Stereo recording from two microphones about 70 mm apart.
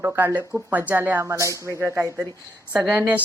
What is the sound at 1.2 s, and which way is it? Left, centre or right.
Speech, right.